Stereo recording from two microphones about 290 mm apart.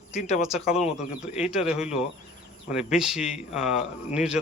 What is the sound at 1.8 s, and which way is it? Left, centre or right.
Speech, left.